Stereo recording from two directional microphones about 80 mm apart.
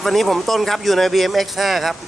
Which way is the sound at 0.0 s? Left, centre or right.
Centre.